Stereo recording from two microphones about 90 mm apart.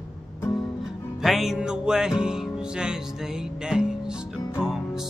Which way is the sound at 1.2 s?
5° right (ahead or behind).